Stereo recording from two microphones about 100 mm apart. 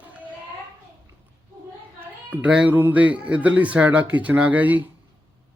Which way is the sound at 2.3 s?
10° right (ahead or behind).